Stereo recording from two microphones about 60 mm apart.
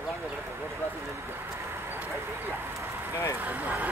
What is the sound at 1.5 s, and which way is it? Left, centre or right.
Vehicle, right.